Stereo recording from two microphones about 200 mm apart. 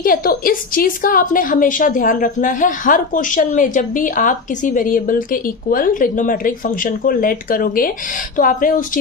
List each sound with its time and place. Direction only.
0.0 s a woman's voice: 45° left (ahead or behind)